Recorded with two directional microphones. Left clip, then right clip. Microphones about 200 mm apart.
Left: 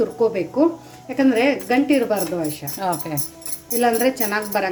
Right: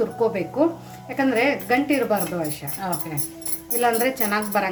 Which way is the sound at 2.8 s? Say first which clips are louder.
Left 5 dB; 45° left (ahead or behind).